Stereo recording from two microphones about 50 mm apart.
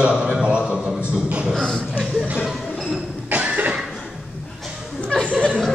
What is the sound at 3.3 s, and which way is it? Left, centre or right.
Cough, right.